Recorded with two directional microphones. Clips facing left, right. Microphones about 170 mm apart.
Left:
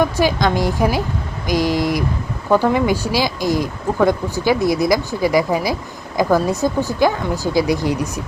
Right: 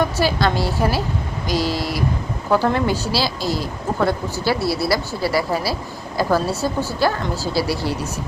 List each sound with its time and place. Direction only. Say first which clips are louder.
0.0 s speech: left 2 dB; 15° left (ahead or behind)